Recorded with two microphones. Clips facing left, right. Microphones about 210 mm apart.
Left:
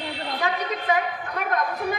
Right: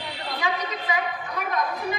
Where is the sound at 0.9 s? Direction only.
55° left (ahead or behind).